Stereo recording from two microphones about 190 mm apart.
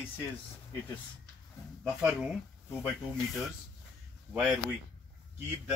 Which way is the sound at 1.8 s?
5° right (ahead or behind).